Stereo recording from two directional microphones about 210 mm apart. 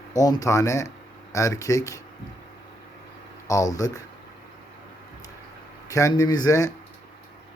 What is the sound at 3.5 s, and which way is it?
Speech, 15° left (ahead or behind).